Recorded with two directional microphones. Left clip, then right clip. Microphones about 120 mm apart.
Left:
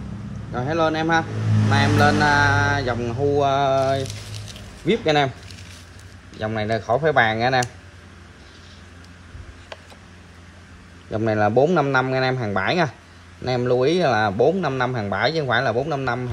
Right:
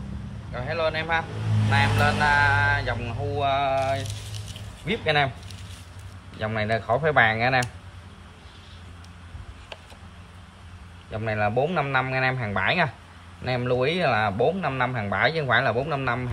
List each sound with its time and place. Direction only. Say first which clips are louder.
0.5 s speech: left 5 dB; 30° left (ahead or behind)
4.0 s a sound: left 5 dB; centre (ahead or behind)
5.0 s speech: left 2 dB; 30° left (ahead or behind)
6.4 s speech: left 2 dB; 25° left (ahead or behind)
11.1 s speech: left 6 dB; 25° left (ahead or behind)
13.4 s speech: left 5 dB; 30° left (ahead or behind)